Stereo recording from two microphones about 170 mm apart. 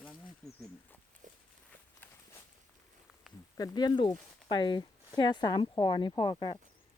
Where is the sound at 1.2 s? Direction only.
50° right (ahead or behind).